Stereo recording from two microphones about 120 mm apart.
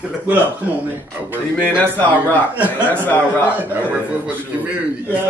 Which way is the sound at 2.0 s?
15° left (ahead or behind).